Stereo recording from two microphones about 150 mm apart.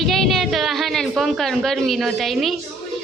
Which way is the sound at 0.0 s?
Centre (ahead or behind).